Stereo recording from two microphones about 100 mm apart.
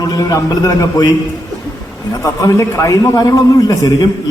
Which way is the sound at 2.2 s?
35° left (ahead or behind).